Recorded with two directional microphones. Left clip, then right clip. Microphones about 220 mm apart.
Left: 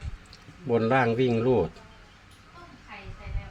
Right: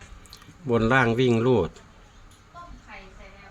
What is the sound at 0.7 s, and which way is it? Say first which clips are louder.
Speech: right 2 dB; 30° right (ahead or behind).